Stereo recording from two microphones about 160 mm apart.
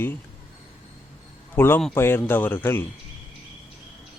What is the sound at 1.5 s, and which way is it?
A man's voice, 15° left (ahead or behind).